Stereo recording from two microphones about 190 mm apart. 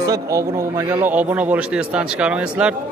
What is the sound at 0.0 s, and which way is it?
Speech, 15° right (ahead or behind).